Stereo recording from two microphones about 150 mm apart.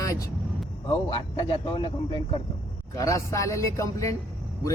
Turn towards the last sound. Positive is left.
turn(degrees=20)  # may be behind; listen again after turning